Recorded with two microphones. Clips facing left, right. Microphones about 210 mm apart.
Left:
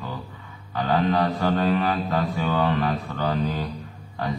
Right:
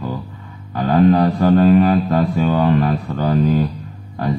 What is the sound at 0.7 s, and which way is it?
Speech, 45° right (ahead or behind).